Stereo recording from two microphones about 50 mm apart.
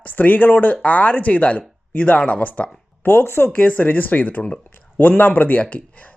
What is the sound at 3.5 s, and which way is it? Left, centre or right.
Speech, left.